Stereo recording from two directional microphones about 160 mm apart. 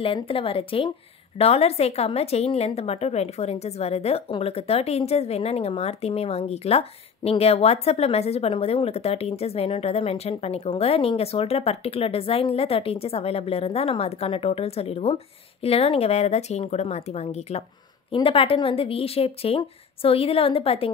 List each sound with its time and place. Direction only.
0.0 s a woman's voice: 35° left (ahead or behind)